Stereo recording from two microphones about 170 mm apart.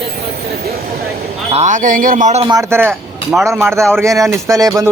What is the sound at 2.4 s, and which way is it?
Speech, 25° right (ahead or behind).